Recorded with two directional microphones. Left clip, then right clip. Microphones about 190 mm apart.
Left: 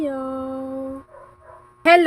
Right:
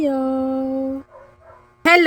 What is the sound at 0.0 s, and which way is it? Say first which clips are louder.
Humming: right 6 dB; 25° right (ahead or behind).